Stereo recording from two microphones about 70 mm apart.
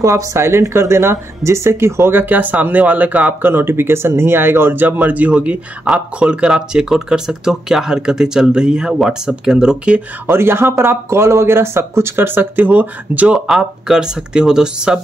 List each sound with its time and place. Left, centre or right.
0.0 s speech: right; by 10.0 s centre
10.2 s speech: right
13.5 s speech: centre